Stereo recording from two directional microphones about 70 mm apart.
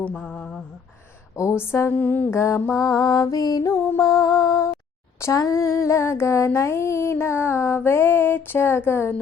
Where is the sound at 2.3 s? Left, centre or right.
Left.